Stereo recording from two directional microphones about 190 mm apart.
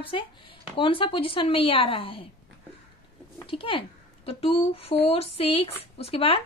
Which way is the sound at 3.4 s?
30° left (ahead or behind).